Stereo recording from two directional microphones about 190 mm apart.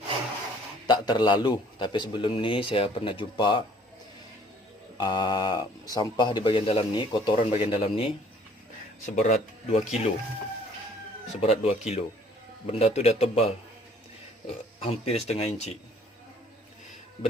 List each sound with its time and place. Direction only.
0.9 s speech: 20° left (ahead or behind)
4.9 s speech: 20° left (ahead or behind)
9.1 s speech: 40° left (ahead or behind)
11.3 s speech: 35° left (ahead or behind)